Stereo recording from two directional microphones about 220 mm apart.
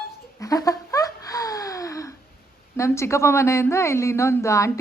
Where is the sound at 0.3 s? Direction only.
15° left (ahead or behind).